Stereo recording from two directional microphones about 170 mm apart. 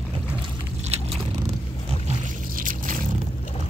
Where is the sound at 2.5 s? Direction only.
50° right (ahead or behind).